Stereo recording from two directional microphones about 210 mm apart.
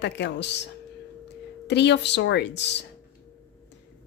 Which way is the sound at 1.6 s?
55° left (ahead or behind).